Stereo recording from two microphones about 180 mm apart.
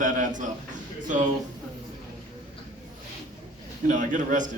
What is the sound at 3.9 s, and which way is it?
Speech, 45° right (ahead or behind).